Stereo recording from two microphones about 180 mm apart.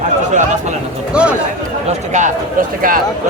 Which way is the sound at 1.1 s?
5° right (ahead or behind).